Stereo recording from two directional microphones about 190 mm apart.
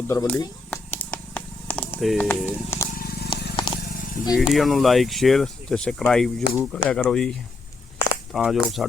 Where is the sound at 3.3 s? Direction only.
25° left (ahead or behind).